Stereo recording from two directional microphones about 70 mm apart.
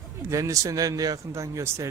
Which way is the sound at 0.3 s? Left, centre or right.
Right.